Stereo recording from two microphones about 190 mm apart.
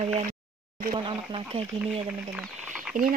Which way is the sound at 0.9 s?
25° right (ahead or behind).